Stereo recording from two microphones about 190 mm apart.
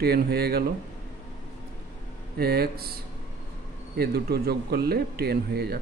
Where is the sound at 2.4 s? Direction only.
55° right (ahead or behind).